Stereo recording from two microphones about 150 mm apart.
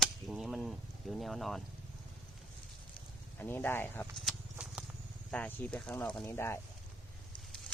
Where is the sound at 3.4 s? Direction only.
15° left (ahead or behind).